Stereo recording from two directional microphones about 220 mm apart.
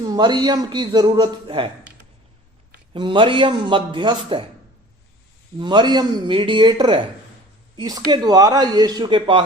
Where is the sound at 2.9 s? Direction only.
20° right (ahead or behind).